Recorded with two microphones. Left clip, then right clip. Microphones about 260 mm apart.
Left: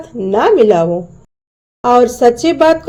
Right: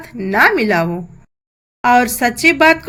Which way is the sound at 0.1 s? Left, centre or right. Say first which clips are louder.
Left 1 dB; right.